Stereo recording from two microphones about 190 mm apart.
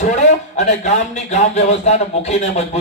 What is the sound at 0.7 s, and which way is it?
A man's voice, 35° left (ahead or behind).